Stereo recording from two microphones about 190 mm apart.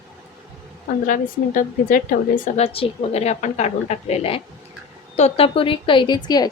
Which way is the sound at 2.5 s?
30° left (ahead or behind).